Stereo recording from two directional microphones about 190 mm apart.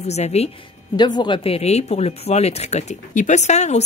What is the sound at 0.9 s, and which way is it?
Speech, 20° left (ahead or behind).